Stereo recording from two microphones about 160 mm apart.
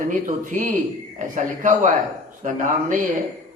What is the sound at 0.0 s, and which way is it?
A man's voice, 55° right (ahead or behind).